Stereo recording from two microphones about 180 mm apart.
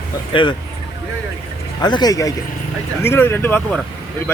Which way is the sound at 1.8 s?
25° left (ahead or behind).